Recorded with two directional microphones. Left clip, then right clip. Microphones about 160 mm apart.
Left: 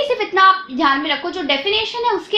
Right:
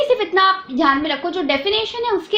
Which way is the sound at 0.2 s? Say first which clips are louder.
Left 3 dB; 35° right (ahead or behind).